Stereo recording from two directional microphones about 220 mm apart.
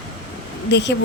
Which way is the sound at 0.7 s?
50° left (ahead or behind).